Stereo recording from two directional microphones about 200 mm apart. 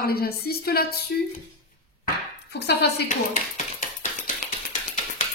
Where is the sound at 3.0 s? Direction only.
40° left (ahead or behind).